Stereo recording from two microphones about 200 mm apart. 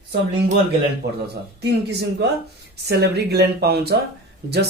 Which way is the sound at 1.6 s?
55° right (ahead or behind).